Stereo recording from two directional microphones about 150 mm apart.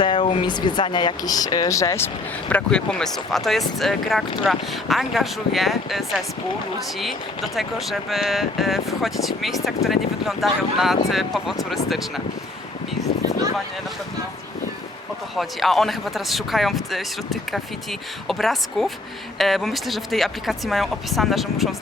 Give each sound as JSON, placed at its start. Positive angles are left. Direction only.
{"t": 0.0, "sound": "speech", "side_deg": 35}
{"t": 2.5, "sound": "speech", "side_deg": 5}
{"t": 15.4, "sound": "speech", "side_deg": 0}
{"t": 18.3, "sound": "speech", "side_deg": 0}